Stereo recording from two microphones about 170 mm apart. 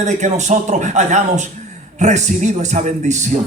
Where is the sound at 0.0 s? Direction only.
45° right (ahead or behind).